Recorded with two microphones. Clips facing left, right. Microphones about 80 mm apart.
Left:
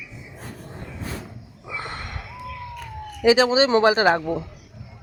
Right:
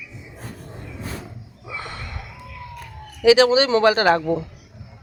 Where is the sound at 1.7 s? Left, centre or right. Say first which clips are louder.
Left 1 dB; left.